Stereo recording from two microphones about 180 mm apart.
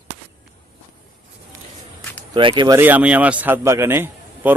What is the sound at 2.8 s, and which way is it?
A man's voice, 10° right (ahead or behind).